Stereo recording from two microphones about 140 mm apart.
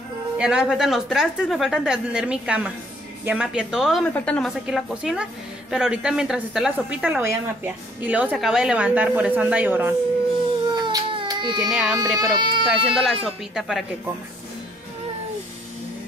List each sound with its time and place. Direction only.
0.4 s a woman's voice: 5° right (ahead or behind)
4.1 s a woman's voice: 10° left (ahead or behind)
4.6 s a woman's voice: 5° right (ahead or behind)
10.7 s baby cry: 30° right (ahead or behind)
11.7 s a woman's voice: 5° right (ahead or behind)
12.2 s speech: 30° right (ahead or behind)
12.6 s a woman's voice: 5° right (ahead or behind)